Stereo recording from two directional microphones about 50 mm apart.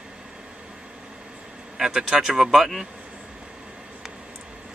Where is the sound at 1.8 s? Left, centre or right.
Centre.